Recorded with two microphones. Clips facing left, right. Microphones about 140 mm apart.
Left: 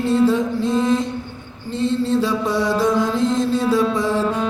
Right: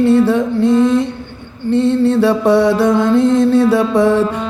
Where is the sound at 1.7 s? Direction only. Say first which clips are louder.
Right 7 dB; 65° right (ahead or behind).